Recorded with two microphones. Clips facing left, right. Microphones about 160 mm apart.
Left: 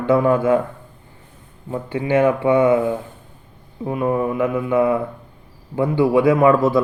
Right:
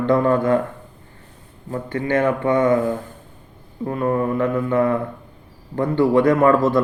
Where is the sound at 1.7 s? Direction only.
10° left (ahead or behind).